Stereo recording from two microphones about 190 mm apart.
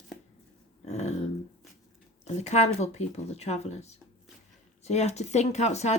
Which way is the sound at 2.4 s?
35° left (ahead or behind).